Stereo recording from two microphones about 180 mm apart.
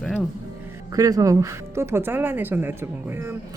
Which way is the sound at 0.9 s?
20° right (ahead or behind).